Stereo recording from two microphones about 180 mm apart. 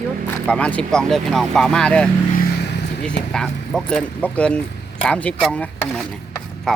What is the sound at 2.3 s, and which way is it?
Vehicle, 60° left (ahead or behind).